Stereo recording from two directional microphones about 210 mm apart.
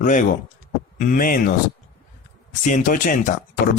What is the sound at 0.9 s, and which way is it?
Speech, 40° left (ahead or behind).